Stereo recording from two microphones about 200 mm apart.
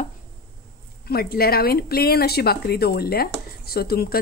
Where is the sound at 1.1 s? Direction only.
50° left (ahead or behind).